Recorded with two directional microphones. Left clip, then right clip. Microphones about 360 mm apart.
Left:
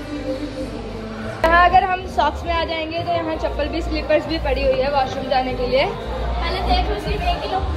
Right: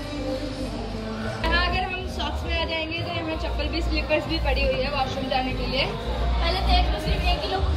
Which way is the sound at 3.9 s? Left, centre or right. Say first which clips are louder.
Left 6 dB; right.